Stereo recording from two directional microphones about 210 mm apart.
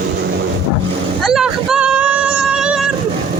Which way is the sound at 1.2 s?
Centre (ahead or behind).